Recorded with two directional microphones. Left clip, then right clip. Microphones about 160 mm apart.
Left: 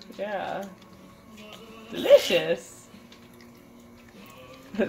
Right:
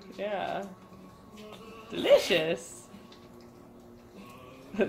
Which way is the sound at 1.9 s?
25° left (ahead or behind).